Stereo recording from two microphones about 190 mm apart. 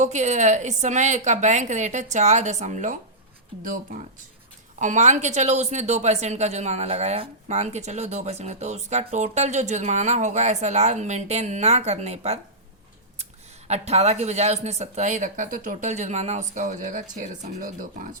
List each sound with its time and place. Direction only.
0.0 s speech: 40° right (ahead or behind)
4.8 s speech: 40° right (ahead or behind)
13.7 s speech: 35° right (ahead or behind)